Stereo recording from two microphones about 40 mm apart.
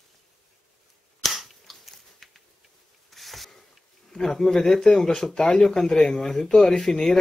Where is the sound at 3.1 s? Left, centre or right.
Centre.